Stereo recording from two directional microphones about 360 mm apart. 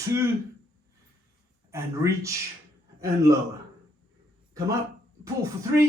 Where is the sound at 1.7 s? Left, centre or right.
Centre.